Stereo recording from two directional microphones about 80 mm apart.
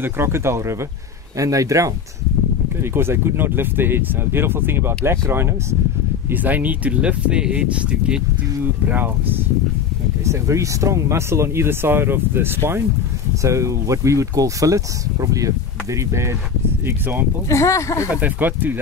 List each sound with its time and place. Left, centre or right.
0.0 s speech: right
2.8 s speech: right
6.3 s speech: right
8.8 s speech: right
10.2 s speech: right
13.4 s speech: right
16.8 s speech: right
17.5 s speech: left
18.1 s speech: right